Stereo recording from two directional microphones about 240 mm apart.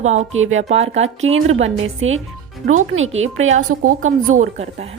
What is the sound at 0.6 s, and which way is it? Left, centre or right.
Speech, right.